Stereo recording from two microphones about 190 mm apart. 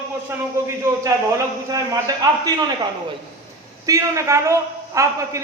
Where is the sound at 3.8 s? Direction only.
15° right (ahead or behind).